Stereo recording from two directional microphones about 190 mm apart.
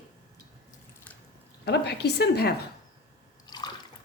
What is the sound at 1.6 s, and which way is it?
Speech, 60° left (ahead or behind).